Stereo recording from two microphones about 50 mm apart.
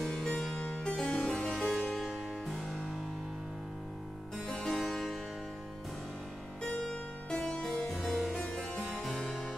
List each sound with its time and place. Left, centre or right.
0.0 s harpsichord: centre
0.6 s harpsichord: left
0.9 s music: centre
1.7 s harpsichord: centre
4.5 s music: centre
6.6 s music: centre
7.9 s music: centre
8.8 s harpsichord: centre